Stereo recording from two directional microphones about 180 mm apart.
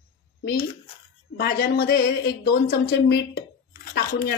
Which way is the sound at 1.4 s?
60° left (ahead or behind).